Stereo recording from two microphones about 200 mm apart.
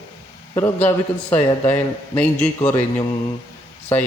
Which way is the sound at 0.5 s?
10° left (ahead or behind).